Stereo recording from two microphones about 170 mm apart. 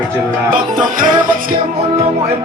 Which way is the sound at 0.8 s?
50° right (ahead or behind).